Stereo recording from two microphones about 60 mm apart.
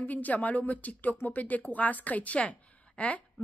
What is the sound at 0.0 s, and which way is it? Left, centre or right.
Speech, left.